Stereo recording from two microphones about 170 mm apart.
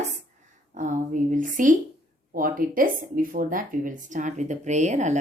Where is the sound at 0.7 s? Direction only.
50° right (ahead or behind).